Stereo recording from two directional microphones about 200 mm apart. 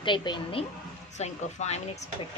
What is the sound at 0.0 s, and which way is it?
A woman's voice, 25° left (ahead or behind).